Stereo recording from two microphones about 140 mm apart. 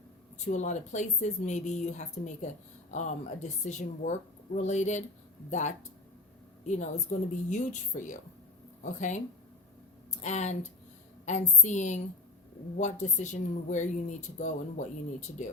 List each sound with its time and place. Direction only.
0.3 s a woman's voice: 55° left (ahead or behind)